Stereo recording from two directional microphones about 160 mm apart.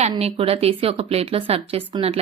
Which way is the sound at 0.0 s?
40° right (ahead or behind).